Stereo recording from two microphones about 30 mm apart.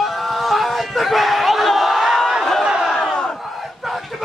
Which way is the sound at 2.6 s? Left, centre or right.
Right.